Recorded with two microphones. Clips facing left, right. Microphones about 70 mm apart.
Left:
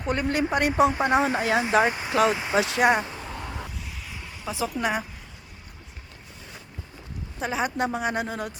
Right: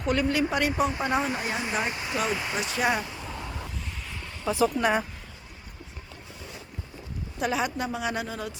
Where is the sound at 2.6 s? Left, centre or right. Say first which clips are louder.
Left 4 dB; left.